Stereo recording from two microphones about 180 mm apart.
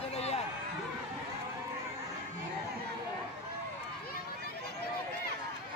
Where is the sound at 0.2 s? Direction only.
35° left (ahead or behind).